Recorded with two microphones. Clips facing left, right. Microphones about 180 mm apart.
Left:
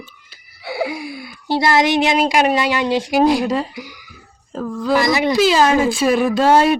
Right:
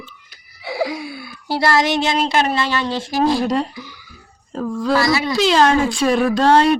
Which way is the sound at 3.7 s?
15° left (ahead or behind).